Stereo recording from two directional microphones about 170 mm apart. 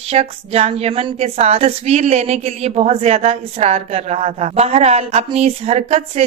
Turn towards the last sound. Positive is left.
turn(degrees=-40)  # may be behind; listen again after turning